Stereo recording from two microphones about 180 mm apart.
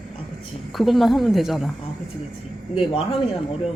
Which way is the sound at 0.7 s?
Centre (ahead or behind).